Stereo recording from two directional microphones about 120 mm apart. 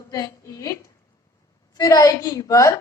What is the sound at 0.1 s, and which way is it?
A woman's voice, 30° left (ahead or behind).